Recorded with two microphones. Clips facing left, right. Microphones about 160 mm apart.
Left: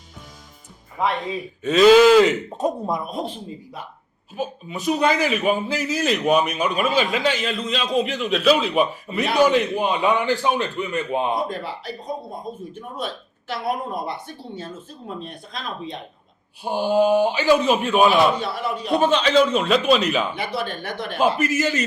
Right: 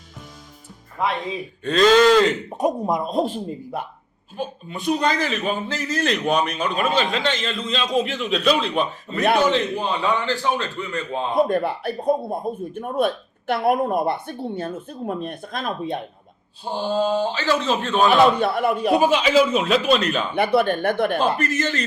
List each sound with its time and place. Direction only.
1.0 s a man's voice: centre (ahead or behind)
2.5 s speech: 15° right (ahead or behind)
3.1 s speech: 45° right (ahead or behind)
4.4 s a man's voice: 5° left (ahead or behind)
11.4 s speech: 55° right (ahead or behind)
16.6 s a man's voice: 15° left (ahead or behind)
18.3 s speech: 55° right (ahead or behind)
18.9 s a man's voice: 5° right (ahead or behind)
20.3 s speech: 60° right (ahead or behind)
21.2 s a man's voice: 5° left (ahead or behind)